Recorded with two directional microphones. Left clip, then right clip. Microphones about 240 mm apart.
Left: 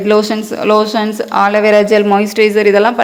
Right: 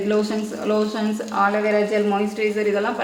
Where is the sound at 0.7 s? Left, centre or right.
Left.